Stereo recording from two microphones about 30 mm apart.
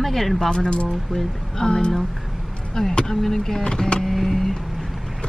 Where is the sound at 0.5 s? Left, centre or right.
Left.